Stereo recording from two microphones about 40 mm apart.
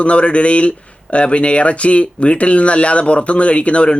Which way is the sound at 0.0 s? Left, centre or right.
Left.